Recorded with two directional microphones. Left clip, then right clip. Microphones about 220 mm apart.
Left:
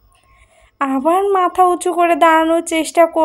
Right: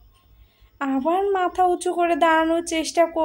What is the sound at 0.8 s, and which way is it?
A woman's voice, 20° left (ahead or behind).